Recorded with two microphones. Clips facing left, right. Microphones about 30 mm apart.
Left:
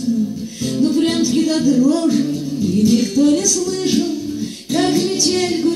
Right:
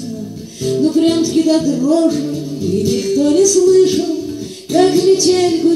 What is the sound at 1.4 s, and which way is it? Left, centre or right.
Music, right.